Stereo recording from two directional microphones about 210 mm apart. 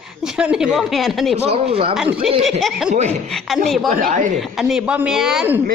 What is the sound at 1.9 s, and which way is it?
Speech, 5° right (ahead or behind).